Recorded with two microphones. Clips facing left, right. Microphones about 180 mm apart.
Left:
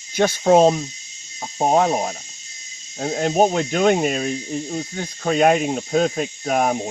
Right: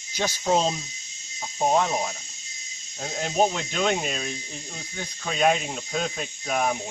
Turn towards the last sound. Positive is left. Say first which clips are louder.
# left 6 dB
turn(degrees=45)  # may be behind; listen again after turning